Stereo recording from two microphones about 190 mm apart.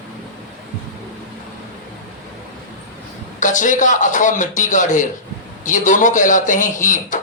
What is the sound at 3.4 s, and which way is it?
A man's voice, 40° left (ahead or behind).